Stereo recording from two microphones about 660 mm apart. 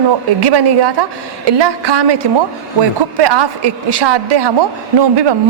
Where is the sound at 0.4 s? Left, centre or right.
Right.